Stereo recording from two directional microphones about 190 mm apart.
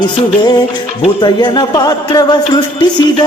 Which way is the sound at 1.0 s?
25° left (ahead or behind).